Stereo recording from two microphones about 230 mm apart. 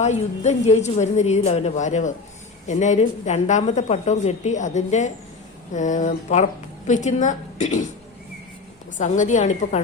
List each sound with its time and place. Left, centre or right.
0.0 s a woman's voice: left
9.0 s a woman's voice: left